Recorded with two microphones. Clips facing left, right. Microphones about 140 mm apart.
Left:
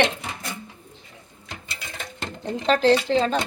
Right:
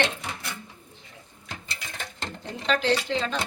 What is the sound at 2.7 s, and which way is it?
Speech, 40° left (ahead or behind).